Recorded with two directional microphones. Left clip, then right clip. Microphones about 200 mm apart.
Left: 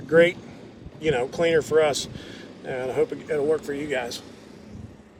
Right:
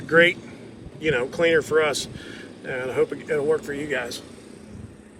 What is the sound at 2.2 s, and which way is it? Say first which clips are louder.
Vehicle: right 2 dB; 15° left (ahead or behind).